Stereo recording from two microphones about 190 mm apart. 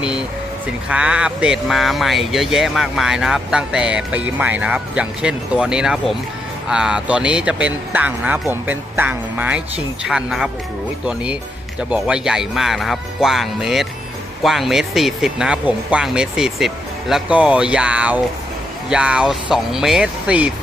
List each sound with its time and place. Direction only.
0.0 s vehicle: 5° right (ahead or behind)
0.9 s speech: 5° right (ahead or behind)